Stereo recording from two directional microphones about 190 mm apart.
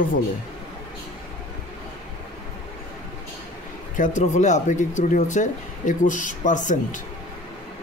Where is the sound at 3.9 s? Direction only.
40° left (ahead or behind).